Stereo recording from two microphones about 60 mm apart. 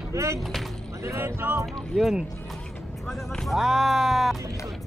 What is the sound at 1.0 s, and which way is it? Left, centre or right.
Speech, right.